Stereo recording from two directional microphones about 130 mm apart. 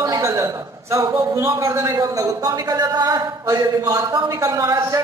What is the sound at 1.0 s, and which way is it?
Speech, 35° right (ahead or behind).